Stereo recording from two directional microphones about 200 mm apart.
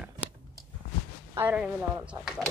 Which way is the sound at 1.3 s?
5° right (ahead or behind).